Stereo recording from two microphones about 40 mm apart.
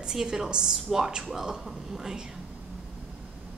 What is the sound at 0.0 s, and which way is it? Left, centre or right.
A woman's voice, centre.